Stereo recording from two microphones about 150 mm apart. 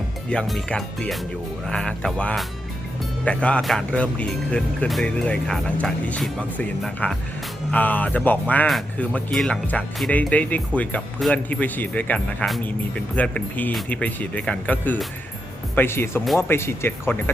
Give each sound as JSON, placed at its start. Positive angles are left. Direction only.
{"t": 0.3, "sound": "speech", "side_deg": 5}